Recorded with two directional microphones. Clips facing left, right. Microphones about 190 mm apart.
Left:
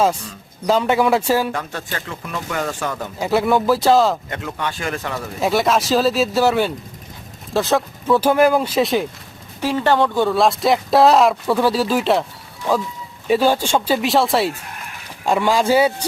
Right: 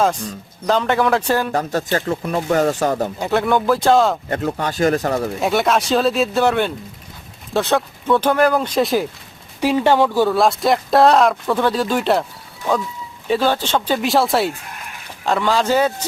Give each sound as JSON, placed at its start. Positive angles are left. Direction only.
{"t": 0.7, "sound": "speech", "side_deg": 5}
{"t": 1.5, "sound": "speech", "side_deg": -40}
{"t": 3.2, "sound": "speech", "side_deg": 5}
{"t": 4.3, "sound": "speech", "side_deg": -40}
{"t": 5.4, "sound": "speech", "side_deg": 0}
{"t": 9.6, "sound": "speech", "side_deg": -15}
{"t": 13.2, "sound": "speech", "side_deg": 10}
{"t": 15.2, "sound": "speech", "side_deg": 10}